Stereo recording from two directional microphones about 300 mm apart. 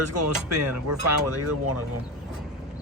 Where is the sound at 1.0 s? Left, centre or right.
Right.